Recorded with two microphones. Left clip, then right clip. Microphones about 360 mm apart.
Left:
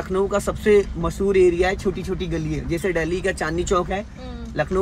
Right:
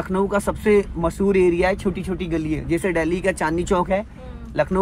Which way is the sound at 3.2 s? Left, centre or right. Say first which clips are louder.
Right 2 dB; right.